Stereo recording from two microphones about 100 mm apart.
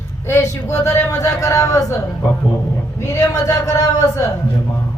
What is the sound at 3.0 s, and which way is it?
A man's voice, 35° left (ahead or behind).